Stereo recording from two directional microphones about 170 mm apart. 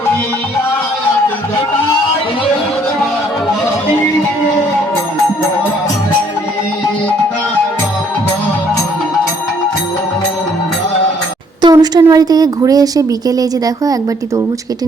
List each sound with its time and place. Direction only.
11.6 s a woman's voice: 25° right (ahead or behind)